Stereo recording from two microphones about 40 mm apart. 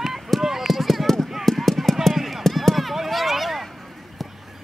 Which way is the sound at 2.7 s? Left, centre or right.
Centre.